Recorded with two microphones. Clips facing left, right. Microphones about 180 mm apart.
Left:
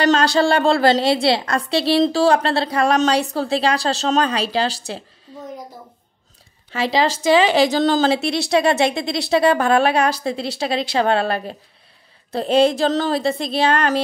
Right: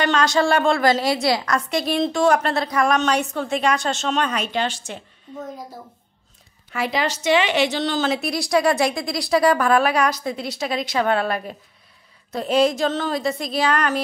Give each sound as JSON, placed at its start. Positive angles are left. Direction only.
{"t": 0.0, "sound": "a woman's voice", "side_deg": 35}
{"t": 6.7, "sound": "a woman's voice", "side_deg": 30}